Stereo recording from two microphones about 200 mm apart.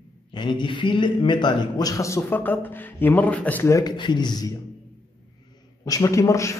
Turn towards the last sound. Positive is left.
turn(degrees=15)  # may be behind; listen again after turning